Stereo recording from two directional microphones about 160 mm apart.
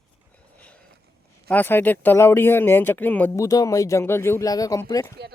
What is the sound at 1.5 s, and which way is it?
Speech, 10° left (ahead or behind).